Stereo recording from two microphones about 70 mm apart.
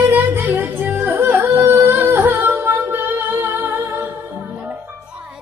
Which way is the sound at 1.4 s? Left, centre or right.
Right.